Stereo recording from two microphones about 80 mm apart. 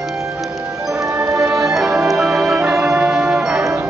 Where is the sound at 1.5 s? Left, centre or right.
Centre.